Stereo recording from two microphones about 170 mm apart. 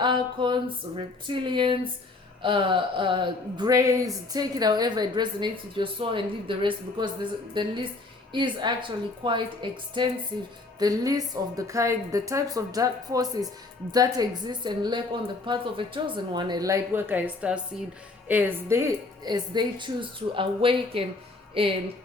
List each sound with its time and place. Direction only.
0.0 s a woman's voice: 30° right (ahead or behind)